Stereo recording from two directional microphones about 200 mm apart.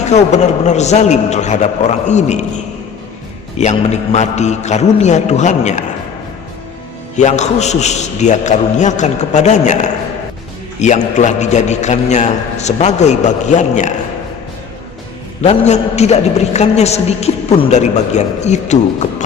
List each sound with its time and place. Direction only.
0.0 s a man's voice: 35° left (ahead or behind)
3.6 s a man's voice: 35° left (ahead or behind)
7.2 s a man's voice: 35° left (ahead or behind)
15.4 s a man's voice: 35° left (ahead or behind)